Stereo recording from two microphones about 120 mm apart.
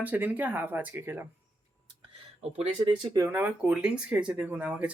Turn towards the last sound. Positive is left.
turn(degrees=-10)  # may be behind; listen again after turning